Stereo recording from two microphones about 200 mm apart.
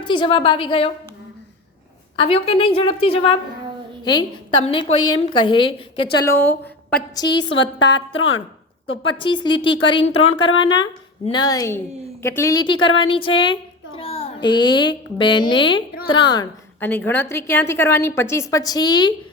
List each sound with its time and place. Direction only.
0.0 s a woman's voice: 25° left (ahead or behind)
2.1 s a woman's voice: 30° left (ahead or behind)
6.2 s a woman's voice: 10° left (ahead or behind)
7.8 s a woman's voice: 60° left (ahead or behind)
8.9 s a woman's voice: 25° left (ahead or behind)
16.8 s a woman's voice: 10° left (ahead or behind)